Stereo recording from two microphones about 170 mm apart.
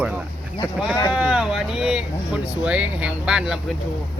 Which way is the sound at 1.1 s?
5° right (ahead or behind).